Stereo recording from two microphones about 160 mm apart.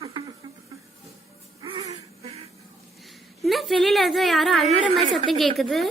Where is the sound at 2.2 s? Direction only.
40° right (ahead or behind).